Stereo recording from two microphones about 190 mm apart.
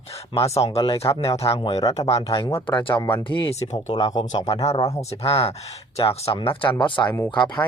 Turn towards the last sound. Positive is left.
turn(degrees=25)  # may be behind; listen again after turning